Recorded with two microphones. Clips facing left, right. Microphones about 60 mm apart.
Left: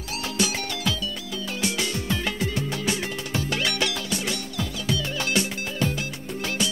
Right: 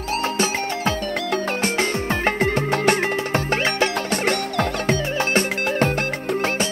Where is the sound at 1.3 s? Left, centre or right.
Right.